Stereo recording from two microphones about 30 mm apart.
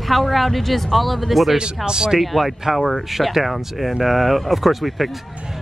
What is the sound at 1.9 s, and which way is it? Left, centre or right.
Speech, right.